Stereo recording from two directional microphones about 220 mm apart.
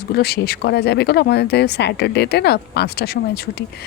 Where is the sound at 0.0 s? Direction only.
45° left (ahead or behind).